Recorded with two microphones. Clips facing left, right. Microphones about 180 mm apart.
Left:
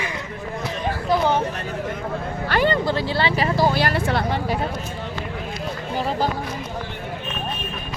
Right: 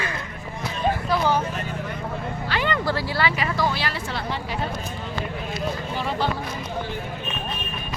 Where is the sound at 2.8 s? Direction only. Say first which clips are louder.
Left 2 dB; 25° left (ahead or behind).